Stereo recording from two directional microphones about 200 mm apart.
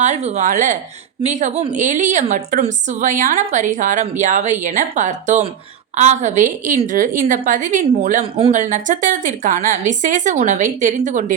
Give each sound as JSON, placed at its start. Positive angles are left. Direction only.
{"t": 0.0, "sound": "a woman's voice", "side_deg": -35}